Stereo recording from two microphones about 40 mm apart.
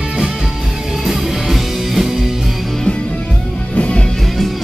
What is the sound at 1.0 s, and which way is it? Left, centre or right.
Music, centre.